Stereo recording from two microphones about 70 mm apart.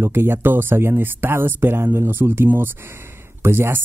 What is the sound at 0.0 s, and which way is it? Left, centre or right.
Speech, right.